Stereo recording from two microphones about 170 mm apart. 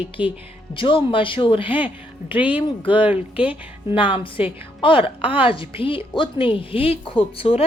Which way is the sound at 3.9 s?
30° left (ahead or behind).